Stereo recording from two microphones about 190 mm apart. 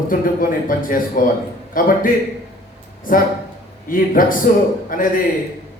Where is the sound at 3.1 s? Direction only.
45° left (ahead or behind).